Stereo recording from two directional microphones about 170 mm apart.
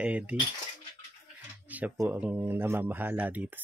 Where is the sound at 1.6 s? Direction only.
10° right (ahead or behind).